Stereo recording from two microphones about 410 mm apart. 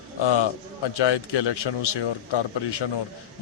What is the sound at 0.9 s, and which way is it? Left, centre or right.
A man's voice, left.